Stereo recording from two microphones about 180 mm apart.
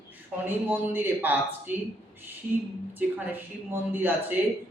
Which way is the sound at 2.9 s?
10° right (ahead or behind).